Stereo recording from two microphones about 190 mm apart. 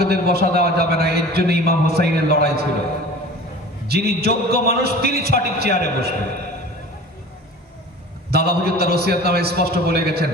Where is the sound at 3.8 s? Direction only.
55° right (ahead or behind).